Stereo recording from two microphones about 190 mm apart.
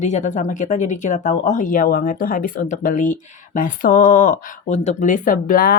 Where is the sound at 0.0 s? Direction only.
40° left (ahead or behind).